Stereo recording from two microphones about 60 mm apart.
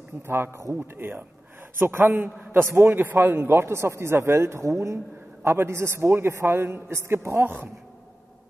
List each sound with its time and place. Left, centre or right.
0.3 s a man's voice: right
7.4 s a man's voice: right